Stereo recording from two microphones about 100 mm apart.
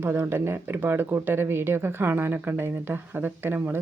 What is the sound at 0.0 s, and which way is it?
Speech, 25° right (ahead or behind).